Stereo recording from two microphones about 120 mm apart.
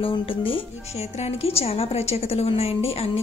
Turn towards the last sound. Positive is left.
turn(degrees=55)  # may be behind; listen again after turning